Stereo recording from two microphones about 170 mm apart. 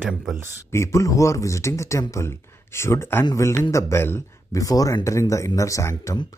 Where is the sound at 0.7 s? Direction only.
15° left (ahead or behind).